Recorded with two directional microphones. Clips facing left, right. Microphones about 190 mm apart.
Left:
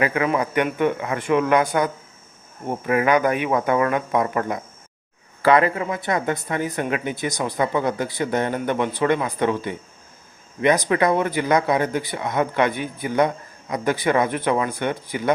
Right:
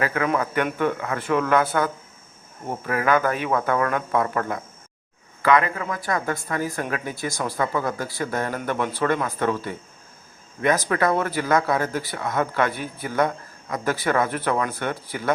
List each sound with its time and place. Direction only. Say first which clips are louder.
0.0 s speech: left 2 dB; 15° left (ahead or behind)
5.4 s speech: left 3 dB; 30° left (ahead or behind); by 15.3 s 15° left (ahead or behind)